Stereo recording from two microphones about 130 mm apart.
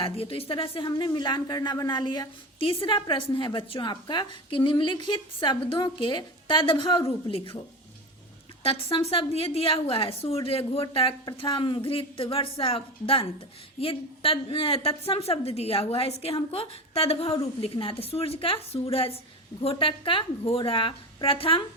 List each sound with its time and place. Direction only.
0.0 s a woman's voice: 45° left (ahead or behind)
8.6 s a woman's voice: 45° left (ahead or behind)